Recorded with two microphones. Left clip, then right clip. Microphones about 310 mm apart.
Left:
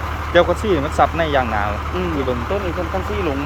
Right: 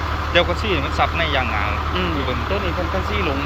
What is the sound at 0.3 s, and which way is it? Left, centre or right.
Speech, left.